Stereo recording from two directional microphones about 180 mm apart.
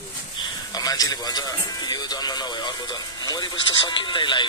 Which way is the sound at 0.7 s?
20° left (ahead or behind).